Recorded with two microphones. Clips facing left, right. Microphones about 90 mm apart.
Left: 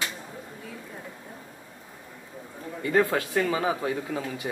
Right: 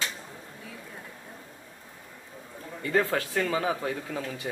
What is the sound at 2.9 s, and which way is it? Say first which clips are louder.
Speech: left 3 dB; 20° left (ahead or behind).